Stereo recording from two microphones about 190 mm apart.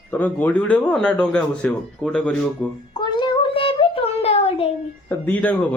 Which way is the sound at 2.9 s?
25° left (ahead or behind).